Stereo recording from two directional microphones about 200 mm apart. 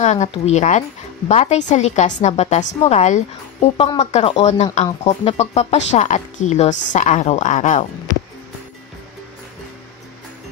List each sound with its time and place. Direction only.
0.0 s a woman's voice: 35° left (ahead or behind)